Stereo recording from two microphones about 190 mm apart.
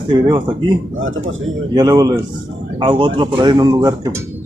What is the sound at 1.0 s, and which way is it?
Speech, 90° right.